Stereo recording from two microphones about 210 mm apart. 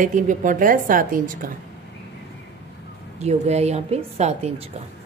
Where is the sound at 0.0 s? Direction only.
40° right (ahead or behind).